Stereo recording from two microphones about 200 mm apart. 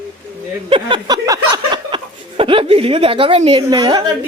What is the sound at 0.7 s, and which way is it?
Speech, 25° right (ahead or behind).